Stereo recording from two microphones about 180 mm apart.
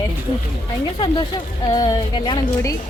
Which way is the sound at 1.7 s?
20° left (ahead or behind).